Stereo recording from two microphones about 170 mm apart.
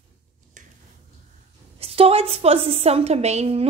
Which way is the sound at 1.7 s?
35° right (ahead or behind).